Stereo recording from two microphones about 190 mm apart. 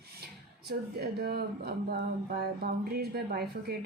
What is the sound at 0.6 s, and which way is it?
Speech, 55° right (ahead or behind).